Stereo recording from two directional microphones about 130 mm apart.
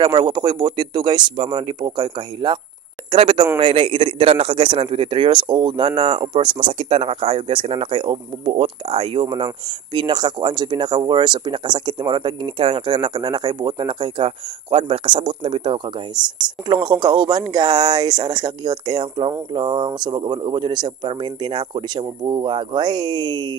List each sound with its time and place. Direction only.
0.0 s a man's voice: 35° right (ahead or behind)